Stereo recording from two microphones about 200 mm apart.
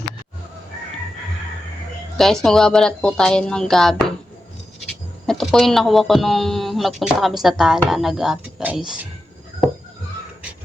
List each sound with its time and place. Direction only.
2.1 s speech: centre (ahead or behind)
5.2 s speech: centre (ahead or behind)